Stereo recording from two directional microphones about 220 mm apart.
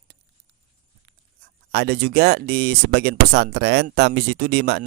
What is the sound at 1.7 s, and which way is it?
Speech, 50° right (ahead or behind).